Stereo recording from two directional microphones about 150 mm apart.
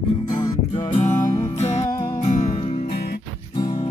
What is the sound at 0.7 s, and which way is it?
Music, 50° left (ahead or behind).